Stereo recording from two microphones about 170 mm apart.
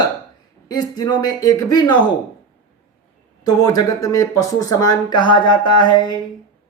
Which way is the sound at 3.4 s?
20° left (ahead or behind).